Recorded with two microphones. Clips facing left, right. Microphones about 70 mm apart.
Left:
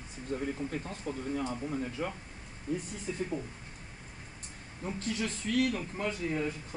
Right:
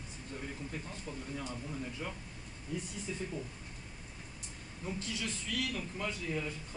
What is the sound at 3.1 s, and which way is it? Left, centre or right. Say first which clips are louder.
Speech: left 6 dB; left.